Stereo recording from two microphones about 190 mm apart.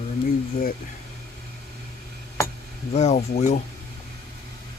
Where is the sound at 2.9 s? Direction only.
35° left (ahead or behind).